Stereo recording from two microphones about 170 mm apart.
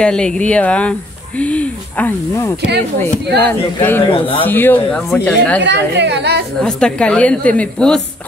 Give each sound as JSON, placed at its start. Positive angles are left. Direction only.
{"t": 0.0, "sound": "speech", "side_deg": 5}
{"t": 4.0, "sound": "speech", "side_deg": 30}
{"t": 4.5, "sound": "speech", "side_deg": 10}
{"t": 5.6, "sound": "a woman's voice", "side_deg": -90}
{"t": 6.6, "sound": "a woman's voice", "side_deg": 5}